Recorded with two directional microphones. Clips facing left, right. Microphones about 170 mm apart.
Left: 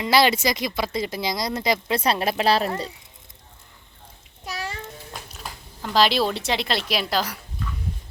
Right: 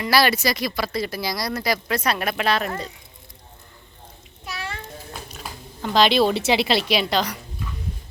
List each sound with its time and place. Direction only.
0.0 s speech: 20° left (ahead or behind)
4.4 s a sound: 40° left (ahead or behind)
5.3 s speech: centre (ahead or behind)